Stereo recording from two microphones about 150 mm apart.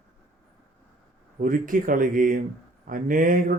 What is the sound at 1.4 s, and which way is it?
Speech, 65° right (ahead or behind).